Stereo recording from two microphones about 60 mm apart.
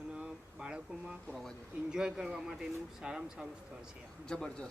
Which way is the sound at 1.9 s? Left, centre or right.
Centre.